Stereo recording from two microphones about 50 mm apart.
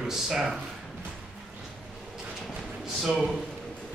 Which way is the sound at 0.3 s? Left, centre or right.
Centre.